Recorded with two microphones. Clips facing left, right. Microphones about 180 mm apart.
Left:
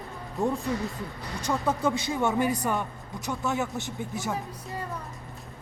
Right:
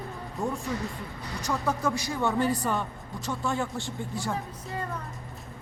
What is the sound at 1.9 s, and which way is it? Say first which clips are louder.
Speech: left 2 dB; 20° left (ahead or behind).